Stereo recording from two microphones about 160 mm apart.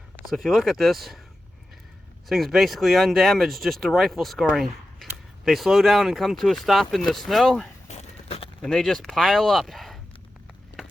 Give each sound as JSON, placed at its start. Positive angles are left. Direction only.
{"t": 0.3, "sound": "speech", "side_deg": 0}
{"t": 2.3, "sound": "speech", "side_deg": 0}
{"t": 7.9, "sound": "a sound", "side_deg": 40}
{"t": 8.6, "sound": "speech", "side_deg": 5}